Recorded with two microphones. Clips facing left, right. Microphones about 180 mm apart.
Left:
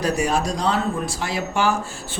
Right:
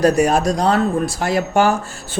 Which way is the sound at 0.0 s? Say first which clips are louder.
Right 7 dB; 50° right (ahead or behind).